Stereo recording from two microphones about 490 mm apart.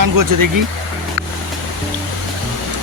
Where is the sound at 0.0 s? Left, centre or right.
Right.